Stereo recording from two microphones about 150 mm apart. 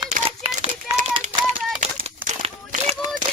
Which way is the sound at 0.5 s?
50° right (ahead or behind).